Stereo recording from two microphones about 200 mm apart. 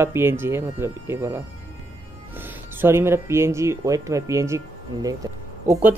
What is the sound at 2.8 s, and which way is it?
Speech, 10° right (ahead or behind).